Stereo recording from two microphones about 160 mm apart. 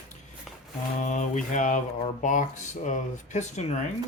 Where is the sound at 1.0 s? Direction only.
50° left (ahead or behind).